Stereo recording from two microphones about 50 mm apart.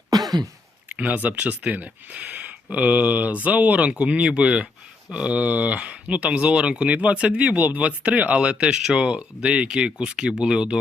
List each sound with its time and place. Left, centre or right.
0.9 s speech: right